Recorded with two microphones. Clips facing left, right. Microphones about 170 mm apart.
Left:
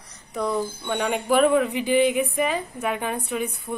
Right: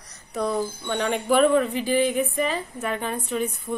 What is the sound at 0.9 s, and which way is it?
Speech, 5° left (ahead or behind).